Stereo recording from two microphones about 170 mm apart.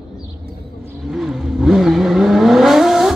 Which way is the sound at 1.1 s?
5° right (ahead or behind).